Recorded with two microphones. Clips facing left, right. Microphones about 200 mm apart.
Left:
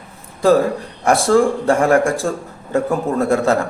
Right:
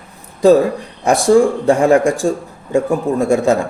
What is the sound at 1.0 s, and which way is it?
A man's voice, 15° right (ahead or behind).